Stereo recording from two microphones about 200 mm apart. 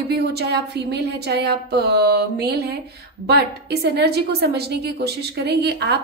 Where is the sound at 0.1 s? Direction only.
55° right (ahead or behind).